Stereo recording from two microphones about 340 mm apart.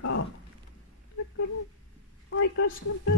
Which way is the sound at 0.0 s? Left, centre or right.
Left.